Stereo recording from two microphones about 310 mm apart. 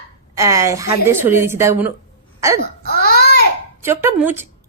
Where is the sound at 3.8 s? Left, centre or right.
Centre.